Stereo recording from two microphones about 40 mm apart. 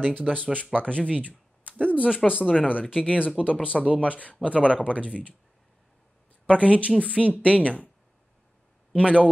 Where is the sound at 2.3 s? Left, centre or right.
Right.